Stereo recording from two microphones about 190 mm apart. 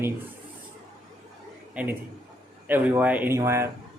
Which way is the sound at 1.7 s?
10° right (ahead or behind).